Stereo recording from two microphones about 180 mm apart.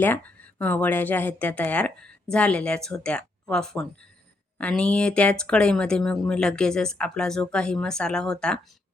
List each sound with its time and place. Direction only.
0.6 s speech: 10° left (ahead or behind)